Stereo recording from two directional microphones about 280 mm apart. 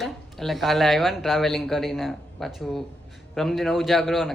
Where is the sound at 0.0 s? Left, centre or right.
Centre.